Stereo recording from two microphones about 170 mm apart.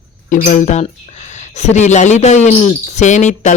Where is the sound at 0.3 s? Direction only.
45° left (ahead or behind).